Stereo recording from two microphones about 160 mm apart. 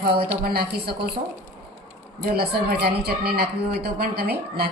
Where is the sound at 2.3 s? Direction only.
80° right.